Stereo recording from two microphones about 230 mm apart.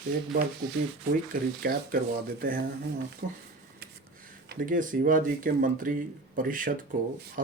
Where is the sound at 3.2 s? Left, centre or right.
Right.